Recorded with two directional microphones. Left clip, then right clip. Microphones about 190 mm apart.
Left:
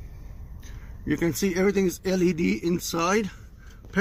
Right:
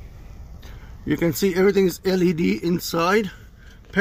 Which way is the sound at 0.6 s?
15° right (ahead or behind).